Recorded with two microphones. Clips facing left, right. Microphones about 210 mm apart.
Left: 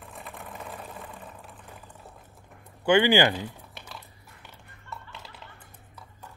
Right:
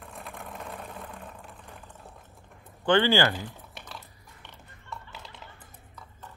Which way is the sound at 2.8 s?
10° left (ahead or behind).